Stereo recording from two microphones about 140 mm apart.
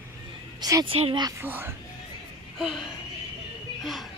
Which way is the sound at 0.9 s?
40° right (ahead or behind).